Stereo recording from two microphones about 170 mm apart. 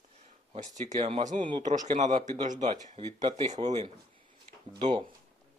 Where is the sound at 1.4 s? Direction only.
30° right (ahead or behind).